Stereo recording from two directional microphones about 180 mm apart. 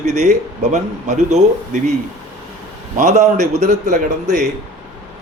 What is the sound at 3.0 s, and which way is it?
Speech, 40° right (ahead or behind).